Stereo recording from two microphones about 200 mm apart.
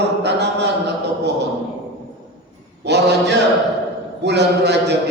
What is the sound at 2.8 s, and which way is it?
A man's voice, 60° right (ahead or behind).